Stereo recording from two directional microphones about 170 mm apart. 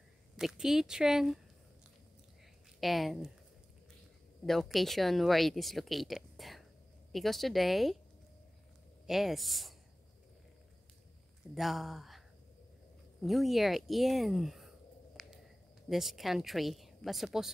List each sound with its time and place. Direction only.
0.4 s speech: centre (ahead or behind)
2.8 s speech: centre (ahead or behind)
4.5 s speech: centre (ahead or behind)
9.0 s speech: centre (ahead or behind)
11.5 s speech: centre (ahead or behind)
13.2 s speech: centre (ahead or behind)
15.2 s a sound: centre (ahead or behind)
15.9 s speech: centre (ahead or behind)